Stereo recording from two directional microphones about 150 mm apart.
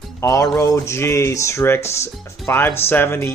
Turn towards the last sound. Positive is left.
turn(degrees=15)  # may be behind; listen again after turning